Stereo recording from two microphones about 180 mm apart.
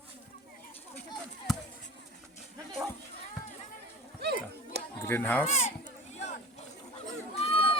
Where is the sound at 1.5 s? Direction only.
Centre (ahead or behind).